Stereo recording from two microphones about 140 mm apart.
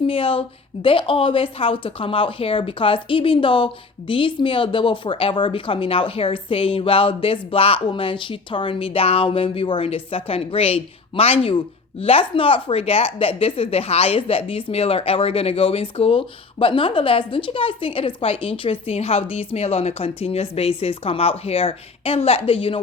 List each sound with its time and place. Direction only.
0.1 s a woman's voice: 40° left (ahead or behind)